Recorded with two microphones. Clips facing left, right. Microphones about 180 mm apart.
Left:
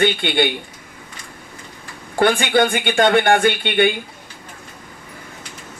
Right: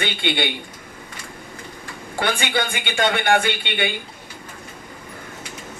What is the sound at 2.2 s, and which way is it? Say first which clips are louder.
Speech: left 8 dB; 50° left (ahead or behind).